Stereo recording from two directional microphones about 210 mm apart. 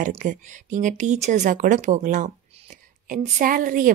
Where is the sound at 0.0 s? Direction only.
35° right (ahead or behind).